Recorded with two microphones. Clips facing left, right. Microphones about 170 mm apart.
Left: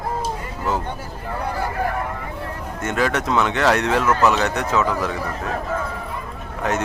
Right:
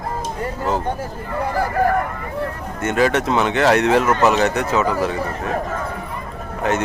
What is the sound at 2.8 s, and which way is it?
Speech, centre (ahead or behind).